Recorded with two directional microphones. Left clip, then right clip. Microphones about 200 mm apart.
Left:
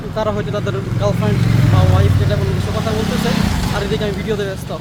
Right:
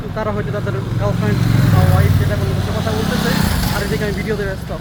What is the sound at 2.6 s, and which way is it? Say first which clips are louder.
Speech: right 1 dB; 20° right (ahead or behind).